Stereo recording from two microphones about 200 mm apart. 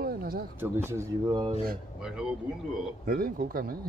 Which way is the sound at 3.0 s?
45° right (ahead or behind).